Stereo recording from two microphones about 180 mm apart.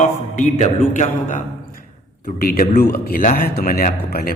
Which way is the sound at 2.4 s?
55° left (ahead or behind).